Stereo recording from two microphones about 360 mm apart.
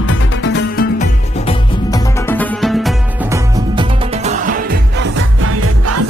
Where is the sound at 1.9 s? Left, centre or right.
Centre.